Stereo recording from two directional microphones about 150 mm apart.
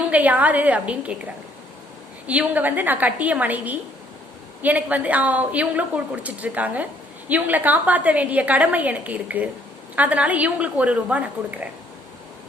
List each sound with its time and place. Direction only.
0.1 s a woman's voice: 10° right (ahead or behind)
2.2 s a woman's voice: 10° right (ahead or behind)